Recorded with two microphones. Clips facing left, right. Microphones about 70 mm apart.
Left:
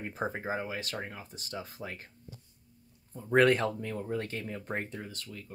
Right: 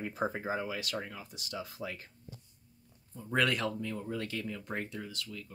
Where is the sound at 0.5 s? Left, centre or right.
Left.